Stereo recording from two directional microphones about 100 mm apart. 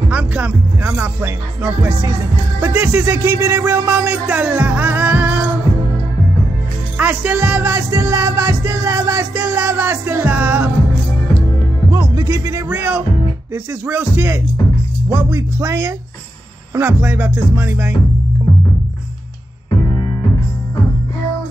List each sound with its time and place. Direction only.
0.1 s music: 15° right (ahead or behind)
7.0 s music: 15° right (ahead or behind)
11.9 s music: 30° right (ahead or behind)
12.6 s music: 15° right (ahead or behind)